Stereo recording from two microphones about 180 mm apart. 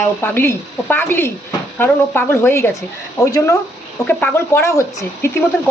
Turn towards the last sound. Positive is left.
turn(degrees=15)  # may be behind; listen again after turning